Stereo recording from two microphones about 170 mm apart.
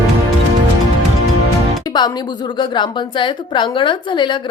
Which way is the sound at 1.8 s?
25° left (ahead or behind).